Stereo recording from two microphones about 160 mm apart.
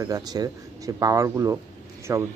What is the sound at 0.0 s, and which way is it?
Speech, 25° right (ahead or behind).